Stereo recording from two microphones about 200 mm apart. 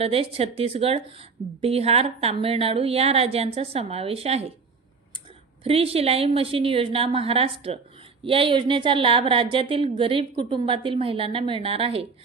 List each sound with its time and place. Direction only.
0.0 s a woman's voice: 30° right (ahead or behind)
5.6 s a woman's voice: 30° right (ahead or behind)